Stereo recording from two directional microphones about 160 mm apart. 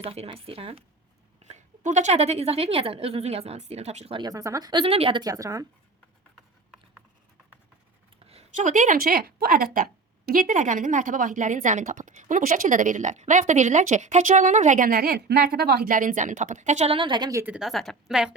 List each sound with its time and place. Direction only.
0.0 s a woman's voice: 40° right (ahead or behind)
4.2 s speech: 20° right (ahead or behind)
5.2 s speech: 20° right (ahead or behind)
8.2 s speech: 40° right (ahead or behind); by 17.4 s 25° right (ahead or behind)
17.4 s a woman's voice: 5° right (ahead or behind)